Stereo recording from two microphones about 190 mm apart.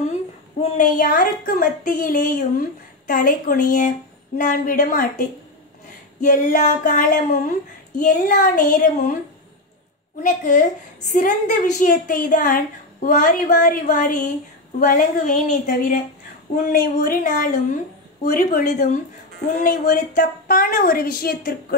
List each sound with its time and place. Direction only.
0.1 s a woman's voice: 35° left (ahead or behind)
6.2 s speech: 40° left (ahead or behind)
10.2 s speech: 45° left (ahead or behind)